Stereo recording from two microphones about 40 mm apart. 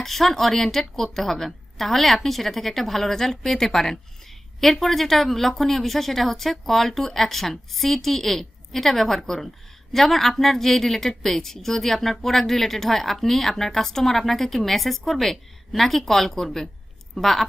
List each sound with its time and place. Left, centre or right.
0.0 s a woman's voice: centre